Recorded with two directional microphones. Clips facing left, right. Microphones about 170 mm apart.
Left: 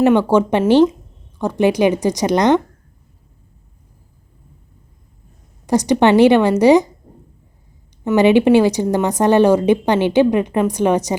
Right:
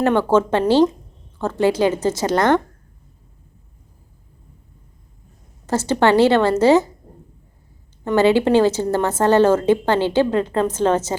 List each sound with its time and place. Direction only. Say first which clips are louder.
0.0 s a woman's voice: left 3 dB; 15° left (ahead or behind)
5.6 s a woman's voice: left 3 dB; 15° left (ahead or behind)
8.1 s a woman's voice: left 3 dB; 15° left (ahead or behind)